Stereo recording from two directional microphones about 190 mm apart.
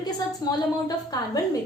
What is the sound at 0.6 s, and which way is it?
Speech, 20° left (ahead or behind).